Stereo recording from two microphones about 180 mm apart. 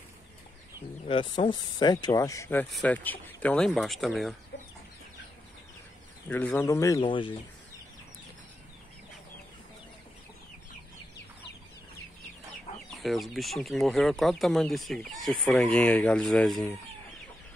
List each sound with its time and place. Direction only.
1.0 s speech: 30° left (ahead or behind); by 4.4 s centre (ahead or behind)
6.2 s speech: 10° left (ahead or behind); by 7.3 s 25° left (ahead or behind)
12.9 s speech: centre (ahead or behind)